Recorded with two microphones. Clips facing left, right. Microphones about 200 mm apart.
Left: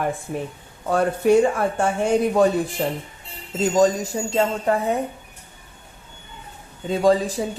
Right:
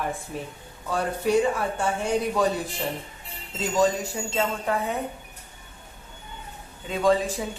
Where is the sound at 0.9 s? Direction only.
50° left (ahead or behind).